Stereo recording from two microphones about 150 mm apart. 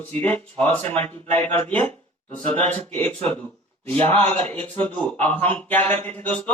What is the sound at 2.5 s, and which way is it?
Speech, 10° left (ahead or behind).